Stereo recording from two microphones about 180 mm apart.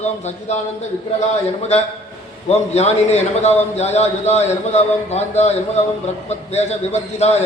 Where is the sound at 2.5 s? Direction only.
35° left (ahead or behind).